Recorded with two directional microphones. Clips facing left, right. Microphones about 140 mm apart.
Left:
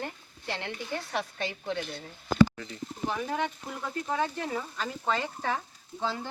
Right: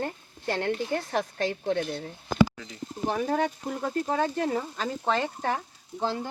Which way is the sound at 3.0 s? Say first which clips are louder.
Right 5 dB; 40° right (ahead or behind).